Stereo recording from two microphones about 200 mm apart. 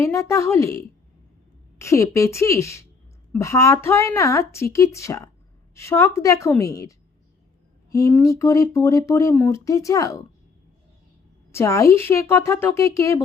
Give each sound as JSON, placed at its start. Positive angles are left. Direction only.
{"t": 0.0, "sound": "speech", "side_deg": 15}
{"t": 1.8, "sound": "speech", "side_deg": 15}
{"t": 11.5, "sound": "speech", "side_deg": 15}